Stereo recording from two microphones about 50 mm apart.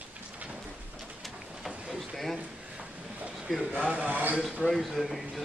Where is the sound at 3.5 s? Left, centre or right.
Centre.